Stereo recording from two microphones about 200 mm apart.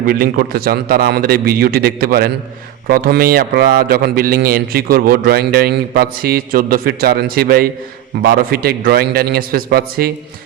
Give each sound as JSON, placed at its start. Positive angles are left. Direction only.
{"t": 0.0, "sound": "a man's voice", "side_deg": -45}